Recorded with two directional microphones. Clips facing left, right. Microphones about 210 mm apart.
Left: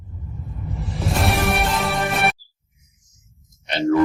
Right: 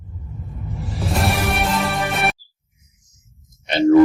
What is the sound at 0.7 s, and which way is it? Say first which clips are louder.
Music: right 1 dB; centre (ahead or behind).